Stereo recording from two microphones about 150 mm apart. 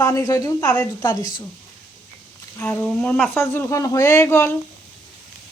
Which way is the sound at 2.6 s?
5° left (ahead or behind).